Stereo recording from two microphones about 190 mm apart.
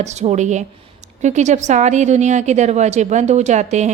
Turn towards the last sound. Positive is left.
turn(degrees=-35)  # may be behind; listen again after turning